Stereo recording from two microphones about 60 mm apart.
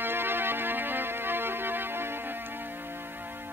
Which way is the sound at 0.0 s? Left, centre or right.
Right.